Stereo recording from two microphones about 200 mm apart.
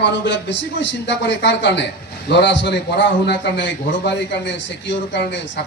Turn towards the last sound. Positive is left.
turn(degrees=60)  # may be behind; listen again after turning